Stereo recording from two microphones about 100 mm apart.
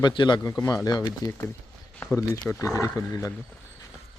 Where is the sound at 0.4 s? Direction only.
30° left (ahead or behind).